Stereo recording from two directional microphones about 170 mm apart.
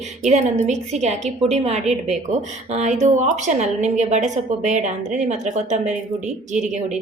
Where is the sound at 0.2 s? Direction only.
45° right (ahead or behind).